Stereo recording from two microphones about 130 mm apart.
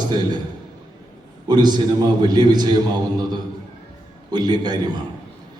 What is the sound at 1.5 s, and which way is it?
A man's voice, 35° right (ahead or behind).